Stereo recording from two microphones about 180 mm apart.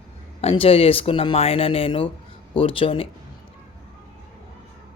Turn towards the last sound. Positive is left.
turn(degrees=30)  # may be behind; listen again after turning